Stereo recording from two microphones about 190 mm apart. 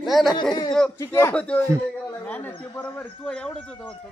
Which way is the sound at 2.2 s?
10° left (ahead or behind).